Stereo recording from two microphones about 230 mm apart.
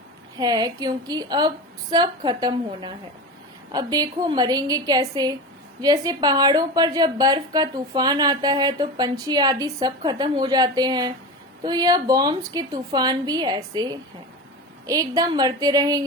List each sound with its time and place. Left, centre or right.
0.3 s a woman's voice: centre